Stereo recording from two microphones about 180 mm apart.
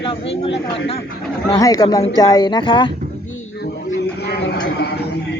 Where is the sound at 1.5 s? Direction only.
20° left (ahead or behind).